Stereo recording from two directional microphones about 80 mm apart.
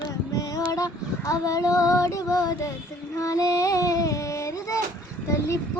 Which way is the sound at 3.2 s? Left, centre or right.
Left.